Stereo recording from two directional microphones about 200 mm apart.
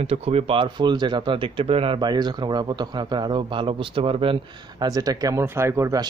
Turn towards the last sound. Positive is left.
turn(degrees=-15)  # may be behind; listen again after turning